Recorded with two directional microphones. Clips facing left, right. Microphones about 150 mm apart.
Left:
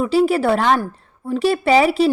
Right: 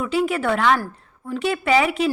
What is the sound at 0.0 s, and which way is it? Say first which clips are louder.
A woman's voice: left 5 dB; 35° left (ahead or behind).